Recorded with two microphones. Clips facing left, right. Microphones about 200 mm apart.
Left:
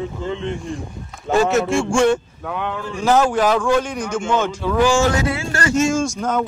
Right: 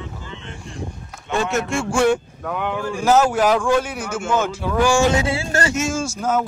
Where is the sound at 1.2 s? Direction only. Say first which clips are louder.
Left 5 dB; 35° left (ahead or behind).